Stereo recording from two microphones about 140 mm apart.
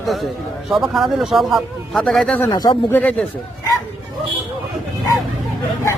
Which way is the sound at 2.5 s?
30° left (ahead or behind).